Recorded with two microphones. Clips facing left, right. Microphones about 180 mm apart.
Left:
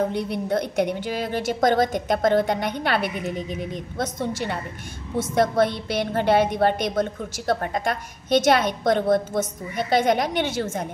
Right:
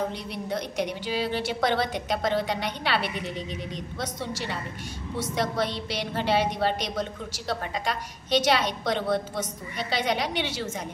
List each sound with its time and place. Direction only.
0.1 s a woman's voice: 55° left (ahead or behind)